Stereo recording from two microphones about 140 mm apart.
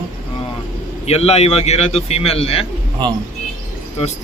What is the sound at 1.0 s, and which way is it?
Speech, 45° left (ahead or behind).